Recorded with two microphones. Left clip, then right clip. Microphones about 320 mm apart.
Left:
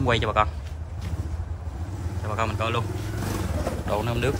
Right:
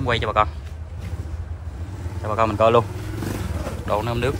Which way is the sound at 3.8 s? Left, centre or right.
Centre.